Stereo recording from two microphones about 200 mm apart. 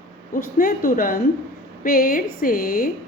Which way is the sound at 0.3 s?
45° left (ahead or behind).